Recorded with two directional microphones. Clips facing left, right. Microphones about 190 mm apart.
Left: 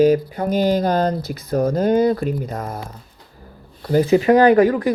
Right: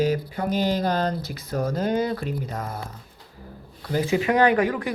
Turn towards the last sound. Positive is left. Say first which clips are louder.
# left 7 dB
turn(degrees=35)  # may be behind; listen again after turning